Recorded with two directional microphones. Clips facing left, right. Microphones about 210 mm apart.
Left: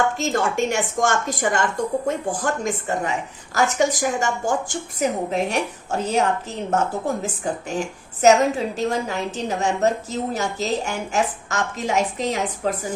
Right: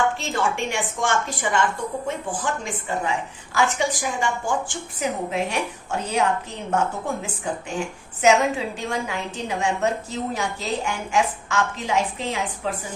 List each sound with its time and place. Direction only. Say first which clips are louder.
0.2 s a woman's voice: left 4 dB; 40° left (ahead or behind)